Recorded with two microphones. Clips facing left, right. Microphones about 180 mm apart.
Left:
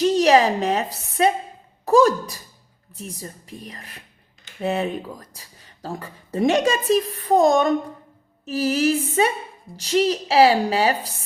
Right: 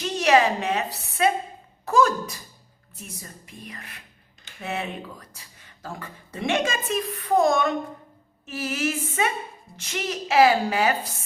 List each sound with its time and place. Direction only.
0.0 s a woman's voice: 35° left (ahead or behind)